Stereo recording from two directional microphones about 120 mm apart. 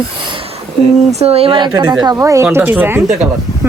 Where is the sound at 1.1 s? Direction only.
55° right (ahead or behind); by 1.8 s 40° right (ahead or behind).